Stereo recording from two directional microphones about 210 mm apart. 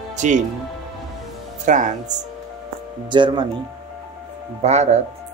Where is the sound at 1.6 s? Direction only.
35° right (ahead or behind).